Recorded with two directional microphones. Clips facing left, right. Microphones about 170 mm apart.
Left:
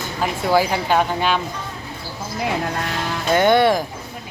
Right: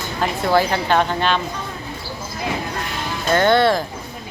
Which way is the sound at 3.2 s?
15° left (ahead or behind).